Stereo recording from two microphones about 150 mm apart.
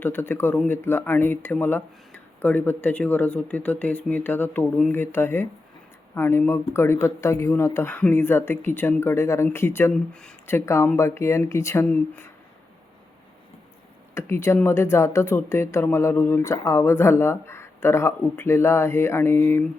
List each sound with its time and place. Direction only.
0.0 s speech: 15° left (ahead or behind)
10.4 s speech: 15° left (ahead or behind)
14.2 s speech: 15° left (ahead or behind)